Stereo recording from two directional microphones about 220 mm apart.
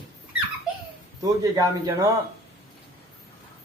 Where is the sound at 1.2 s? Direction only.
15° right (ahead or behind).